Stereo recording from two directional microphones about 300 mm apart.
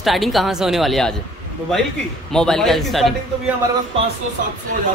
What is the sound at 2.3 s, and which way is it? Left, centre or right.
Speech, centre.